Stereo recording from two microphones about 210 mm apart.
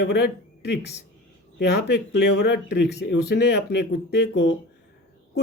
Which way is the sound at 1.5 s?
50° left (ahead or behind).